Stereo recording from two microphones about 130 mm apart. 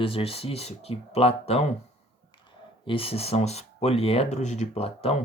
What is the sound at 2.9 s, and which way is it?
Speech, 45° left (ahead or behind).